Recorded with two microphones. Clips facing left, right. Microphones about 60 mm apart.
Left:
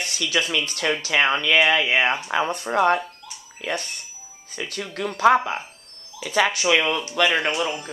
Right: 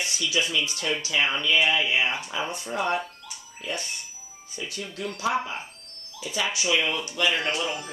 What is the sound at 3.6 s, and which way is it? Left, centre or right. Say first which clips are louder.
Speech: left 5 dB; left.